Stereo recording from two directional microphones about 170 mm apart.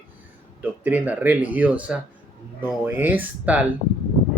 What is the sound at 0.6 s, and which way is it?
Speech, 10° right (ahead or behind).